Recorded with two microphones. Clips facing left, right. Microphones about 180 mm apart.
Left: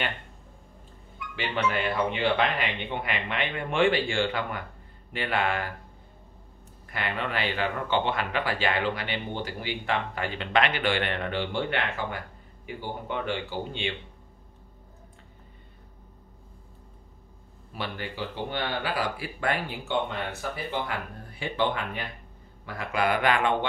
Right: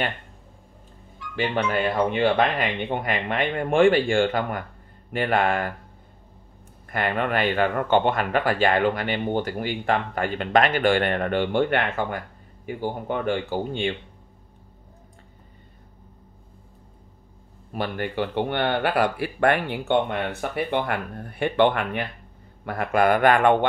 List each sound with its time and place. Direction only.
1.3 s speech: 45° right (ahead or behind)
6.9 s speech: 50° right (ahead or behind)
17.7 s speech: 50° right (ahead or behind)
22.7 s speech: 55° right (ahead or behind)